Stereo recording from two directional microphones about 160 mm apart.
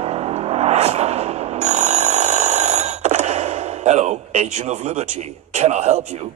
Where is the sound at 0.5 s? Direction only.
40° right (ahead or behind).